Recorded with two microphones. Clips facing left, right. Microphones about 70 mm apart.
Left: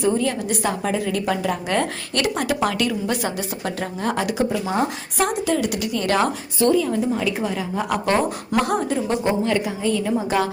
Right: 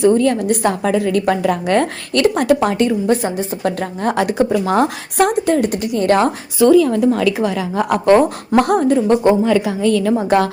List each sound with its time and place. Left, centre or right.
0.0 s a woman's voice: right
2.6 s a woman's voice: right
3.6 s a woman's voice: right
6.8 s a woman's voice: right
7.9 s a woman's voice: right
9.6 s a woman's voice: right
10.1 s a woman's voice: right